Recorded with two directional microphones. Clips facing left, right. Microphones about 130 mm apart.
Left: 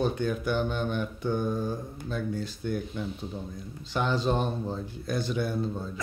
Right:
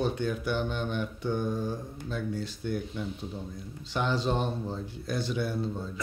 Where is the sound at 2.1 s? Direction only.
45° left (ahead or behind).